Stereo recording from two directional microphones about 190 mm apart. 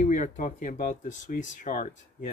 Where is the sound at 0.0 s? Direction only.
40° left (ahead or behind).